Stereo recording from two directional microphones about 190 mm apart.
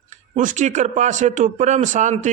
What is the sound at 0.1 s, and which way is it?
A man's voice, 40° right (ahead or behind).